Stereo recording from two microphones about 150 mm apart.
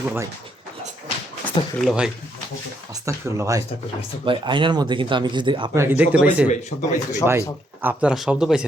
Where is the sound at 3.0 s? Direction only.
20° right (ahead or behind).